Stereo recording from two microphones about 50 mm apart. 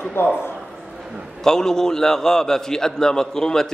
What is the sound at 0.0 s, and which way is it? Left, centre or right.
Speech, left.